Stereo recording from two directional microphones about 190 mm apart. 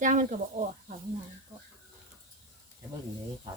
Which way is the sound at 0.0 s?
40° right (ahead or behind).